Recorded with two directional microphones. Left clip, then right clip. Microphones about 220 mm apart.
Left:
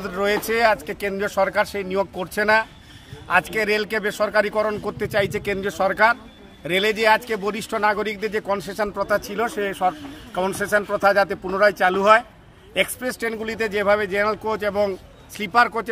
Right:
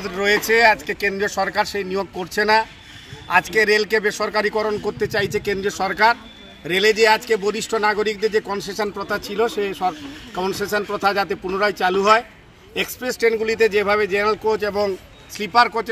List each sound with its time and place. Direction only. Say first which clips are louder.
0.0 s a man's voice: right 3 dB; 25° left (ahead or behind)